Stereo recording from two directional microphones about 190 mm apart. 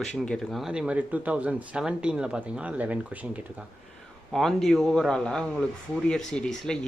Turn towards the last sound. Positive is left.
turn(degrees=5)  # may be behind; listen again after turning